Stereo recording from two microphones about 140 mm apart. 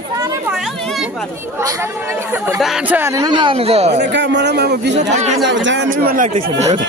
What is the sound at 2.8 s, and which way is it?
Speech, 15° right (ahead or behind).